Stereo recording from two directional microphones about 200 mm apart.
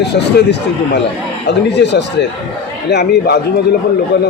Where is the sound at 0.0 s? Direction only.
55° left (ahead or behind).